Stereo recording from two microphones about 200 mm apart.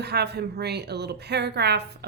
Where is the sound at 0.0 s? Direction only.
55° right (ahead or behind).